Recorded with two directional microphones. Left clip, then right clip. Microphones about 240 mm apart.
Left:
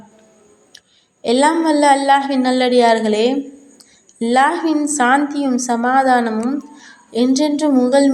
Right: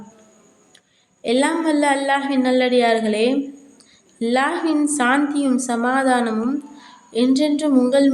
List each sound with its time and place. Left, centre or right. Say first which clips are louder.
1.2 s a woman's voice: left 5 dB; centre